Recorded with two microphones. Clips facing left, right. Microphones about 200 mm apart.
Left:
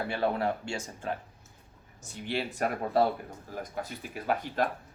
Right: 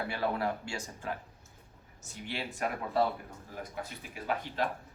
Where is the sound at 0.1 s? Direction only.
25° left (ahead or behind).